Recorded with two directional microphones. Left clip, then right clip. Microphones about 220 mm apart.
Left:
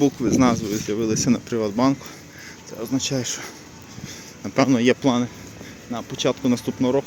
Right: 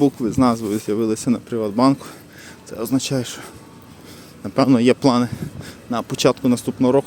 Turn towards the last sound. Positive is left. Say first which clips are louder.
# right 4 dB
turn(degrees=-20)  # may be behind; listen again after turning